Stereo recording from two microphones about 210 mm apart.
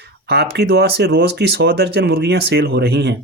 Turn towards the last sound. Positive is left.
turn(degrees=-50)  # may be behind; listen again after turning